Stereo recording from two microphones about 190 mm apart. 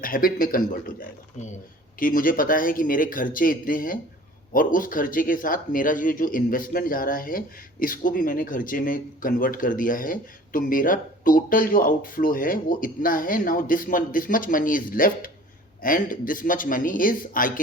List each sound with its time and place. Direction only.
0.0 s speech: 50° left (ahead or behind)
1.4 s speech: 35° left (ahead or behind)
2.0 s speech: 45° left (ahead or behind)